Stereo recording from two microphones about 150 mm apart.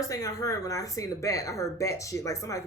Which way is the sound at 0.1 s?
20° left (ahead or behind).